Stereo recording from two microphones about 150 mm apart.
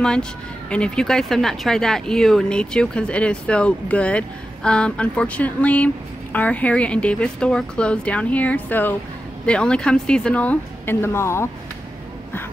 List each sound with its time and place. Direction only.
0.0 s speech: 5° left (ahead or behind)